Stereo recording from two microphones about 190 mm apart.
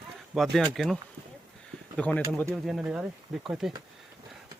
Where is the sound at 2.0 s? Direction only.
10° left (ahead or behind).